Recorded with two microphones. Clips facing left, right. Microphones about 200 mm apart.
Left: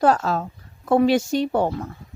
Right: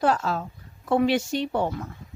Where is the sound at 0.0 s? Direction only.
40° left (ahead or behind).